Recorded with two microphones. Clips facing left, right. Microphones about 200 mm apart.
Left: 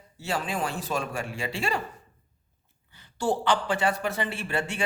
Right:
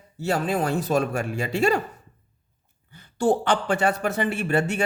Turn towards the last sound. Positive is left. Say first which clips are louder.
# right 7 dB
turn(degrees=-45)  # may be behind; listen again after turning